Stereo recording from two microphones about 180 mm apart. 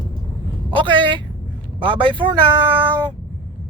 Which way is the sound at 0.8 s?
25° right (ahead or behind).